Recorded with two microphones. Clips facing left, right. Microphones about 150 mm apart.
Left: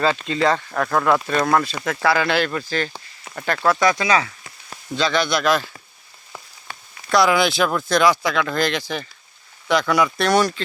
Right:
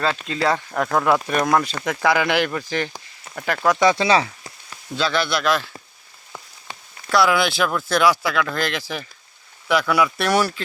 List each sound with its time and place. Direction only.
0.0 s speech: centre (ahead or behind)
3.8 s speech: 25° right (ahead or behind)
4.9 s speech: 5° right (ahead or behind)
7.1 s speech: centre (ahead or behind)